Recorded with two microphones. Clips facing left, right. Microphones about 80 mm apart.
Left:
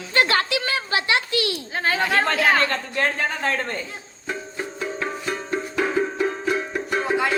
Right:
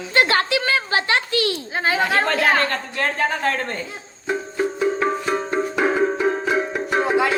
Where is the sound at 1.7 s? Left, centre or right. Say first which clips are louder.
Right 1 dB; centre.